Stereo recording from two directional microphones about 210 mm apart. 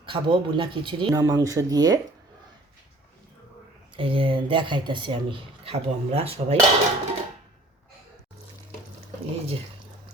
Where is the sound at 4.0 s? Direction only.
25° right (ahead or behind).